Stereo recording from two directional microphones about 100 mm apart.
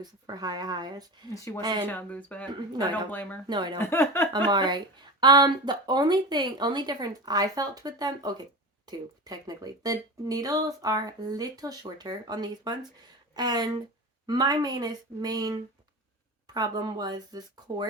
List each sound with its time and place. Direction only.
0.0 s speech: 45° right (ahead or behind)
1.3 s speech: 30° left (ahead or behind)
1.9 s speech: 15° left (ahead or behind)
2.5 s speech: 45° right (ahead or behind)
3.1 s speech: 15° left (ahead or behind)
3.4 s speech: 50° right (ahead or behind)
3.8 s speech: 25° left (ahead or behind)
4.4 s speech: 50° right (ahead or behind)